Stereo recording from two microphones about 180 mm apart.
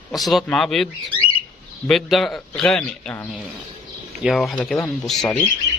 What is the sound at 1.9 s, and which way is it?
A man's voice, centre (ahead or behind).